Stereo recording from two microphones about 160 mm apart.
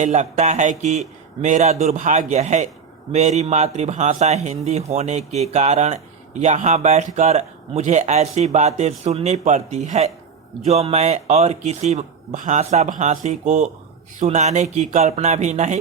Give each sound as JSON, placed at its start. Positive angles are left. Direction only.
{"t": 0.0, "sound": "a man's voice", "side_deg": -45}